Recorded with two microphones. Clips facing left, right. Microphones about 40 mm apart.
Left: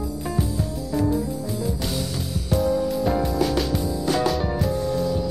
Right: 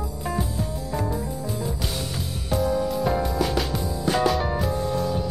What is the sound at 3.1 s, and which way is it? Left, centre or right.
Music, centre.